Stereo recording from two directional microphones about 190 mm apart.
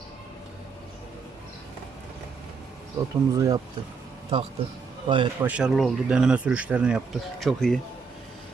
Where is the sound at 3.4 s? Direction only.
20° right (ahead or behind).